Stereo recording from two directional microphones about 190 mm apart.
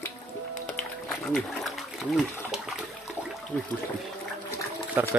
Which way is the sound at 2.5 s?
5° right (ahead or behind).